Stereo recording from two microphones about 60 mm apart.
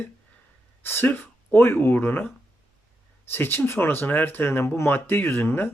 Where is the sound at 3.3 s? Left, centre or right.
Left.